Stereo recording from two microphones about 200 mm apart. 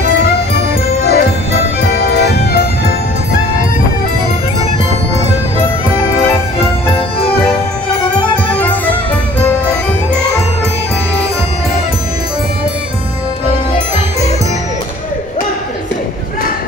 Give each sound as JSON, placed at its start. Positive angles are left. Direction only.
{"t": 0.2, "sound": "music", "side_deg": 55}
{"t": 8.2, "sound": "music", "side_deg": 5}